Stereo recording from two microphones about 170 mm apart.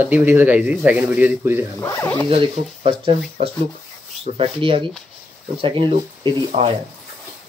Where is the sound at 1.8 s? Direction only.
15° left (ahead or behind).